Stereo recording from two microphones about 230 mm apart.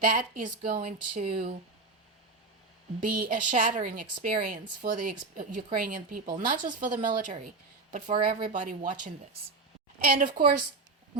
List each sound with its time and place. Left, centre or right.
0.0 s a woman's voice: right
3.0 s a woman's voice: right
8.1 s a woman's voice: right
8.5 s a woman's voice: right